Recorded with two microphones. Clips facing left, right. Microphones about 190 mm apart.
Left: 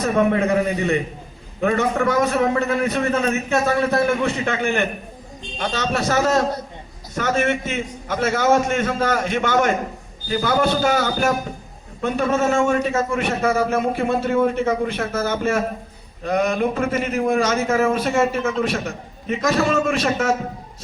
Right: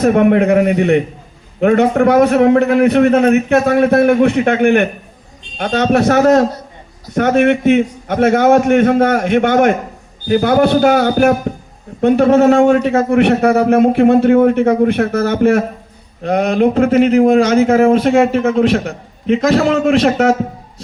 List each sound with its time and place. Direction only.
0.0 s a man's voice: 60° right (ahead or behind)